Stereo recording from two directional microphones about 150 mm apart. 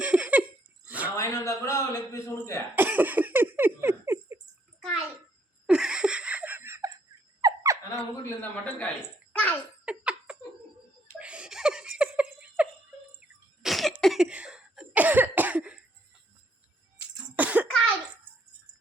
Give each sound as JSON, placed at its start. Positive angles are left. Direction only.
{"t": 0.0, "sound": "laughter", "side_deg": -10}
{"t": 1.1, "sound": "speech", "side_deg": 20}
{"t": 2.7, "sound": "laughter", "side_deg": -10}
{"t": 5.6, "sound": "a sound", "side_deg": -5}
{"t": 8.2, "sound": "a sound", "side_deg": 10}
{"t": 9.3, "sound": "giggle", "side_deg": 10}
{"t": 9.8, "sound": "laughter", "side_deg": -5}
{"t": 13.6, "sound": "cough", "side_deg": 0}
{"t": 17.3, "sound": "cough", "side_deg": -10}